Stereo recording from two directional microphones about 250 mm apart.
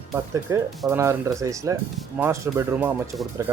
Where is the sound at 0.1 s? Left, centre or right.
Centre.